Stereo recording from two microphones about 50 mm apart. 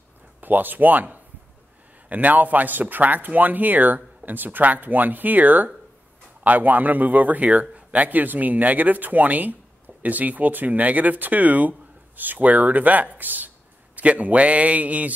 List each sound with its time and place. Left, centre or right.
0.4 s a man's voice: right